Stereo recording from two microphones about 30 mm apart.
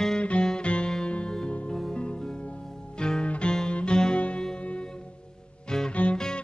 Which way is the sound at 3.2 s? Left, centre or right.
Left.